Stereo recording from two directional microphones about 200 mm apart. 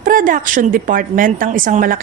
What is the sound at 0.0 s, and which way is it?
A woman's voice, 45° right (ahead or behind).